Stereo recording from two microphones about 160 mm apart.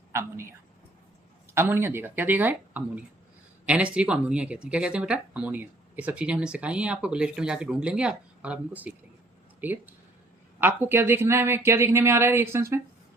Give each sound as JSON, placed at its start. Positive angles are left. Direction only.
{"t": 0.1, "sound": "a woman's voice", "side_deg": -15}
{"t": 1.5, "sound": "speech", "side_deg": -15}